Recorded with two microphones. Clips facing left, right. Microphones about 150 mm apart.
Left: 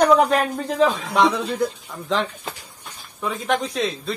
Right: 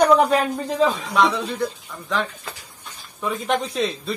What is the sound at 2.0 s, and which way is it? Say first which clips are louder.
Speech: left 2 dB; 20° left (ahead or behind).